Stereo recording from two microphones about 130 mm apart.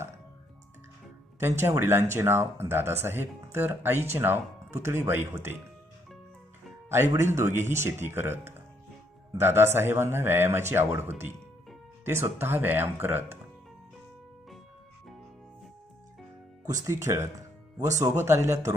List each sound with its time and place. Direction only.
1.4 s speech: 20° right (ahead or behind)
7.2 s speech: 20° right (ahead or behind)
12.0 s speech: 20° right (ahead or behind)
16.6 s speech: 25° right (ahead or behind)